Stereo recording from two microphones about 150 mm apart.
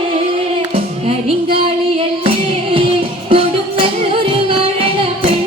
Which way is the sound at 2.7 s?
40° right (ahead or behind).